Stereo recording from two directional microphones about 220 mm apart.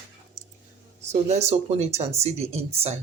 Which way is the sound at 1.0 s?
30° right (ahead or behind).